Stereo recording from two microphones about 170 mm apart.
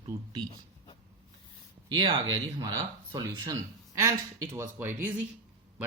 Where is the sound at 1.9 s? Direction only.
25° right (ahead or behind).